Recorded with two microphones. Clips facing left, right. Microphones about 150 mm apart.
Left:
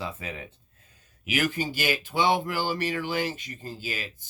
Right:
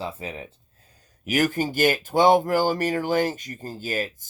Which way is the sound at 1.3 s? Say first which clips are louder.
Right 5 dB; 45° right (ahead or behind).